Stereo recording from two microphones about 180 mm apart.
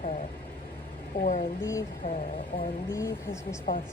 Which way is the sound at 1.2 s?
45° left (ahead or behind).